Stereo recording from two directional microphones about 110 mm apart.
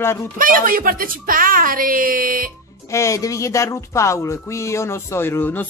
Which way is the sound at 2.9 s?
25° left (ahead or behind).